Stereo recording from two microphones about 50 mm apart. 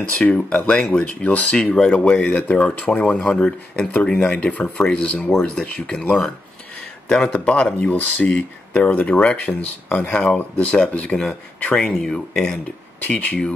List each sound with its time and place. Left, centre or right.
0.1 s speech: left
2.2 s speech: left
2.5 s speech: left
3.9 s speech: left
7.4 s speech: left
13.2 s speech: left